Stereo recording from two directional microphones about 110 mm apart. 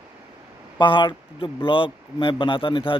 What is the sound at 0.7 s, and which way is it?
Speech, 45° left (ahead or behind).